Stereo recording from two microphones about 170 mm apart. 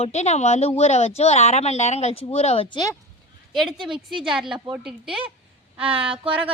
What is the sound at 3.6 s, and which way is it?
A woman's voice, centre (ahead or behind).